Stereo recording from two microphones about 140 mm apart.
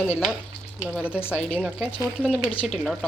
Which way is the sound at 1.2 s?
15° left (ahead or behind).